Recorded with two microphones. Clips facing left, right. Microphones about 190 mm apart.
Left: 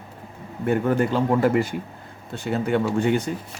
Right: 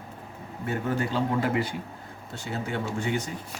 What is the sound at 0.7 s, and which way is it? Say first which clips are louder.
Speech: left 8 dB; 55° left (ahead or behind).